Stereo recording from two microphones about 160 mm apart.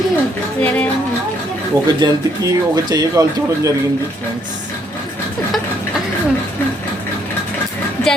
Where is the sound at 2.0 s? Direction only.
25° right (ahead or behind).